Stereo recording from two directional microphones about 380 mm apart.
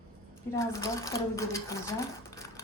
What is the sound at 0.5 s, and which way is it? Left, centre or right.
Speech, centre.